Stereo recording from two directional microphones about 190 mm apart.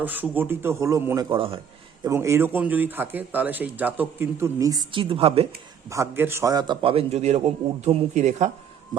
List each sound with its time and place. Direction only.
0.0 s speech: 10° right (ahead or behind); by 1.6 s 30° right (ahead or behind)
2.0 s speech: 15° right (ahead or behind); by 5.5 s 30° right (ahead or behind)
5.9 s a man's voice: 15° right (ahead or behind); by 8.4 s 35° right (ahead or behind)